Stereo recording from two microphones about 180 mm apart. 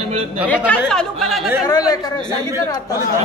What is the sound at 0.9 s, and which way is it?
Speech, centre (ahead or behind).